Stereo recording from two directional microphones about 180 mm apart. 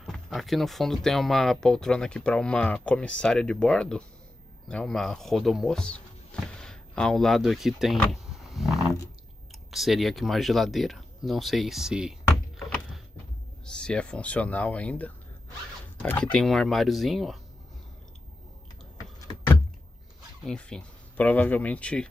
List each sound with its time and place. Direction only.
0.0 s speech: centre (ahead or behind)
13.7 s speech: 5° left (ahead or behind)
19.1 s a sound: 20° left (ahead or behind)
20.4 s speech: 5° left (ahead or behind)